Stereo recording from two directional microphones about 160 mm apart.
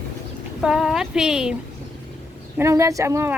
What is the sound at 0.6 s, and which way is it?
Speech, 5° right (ahead or behind).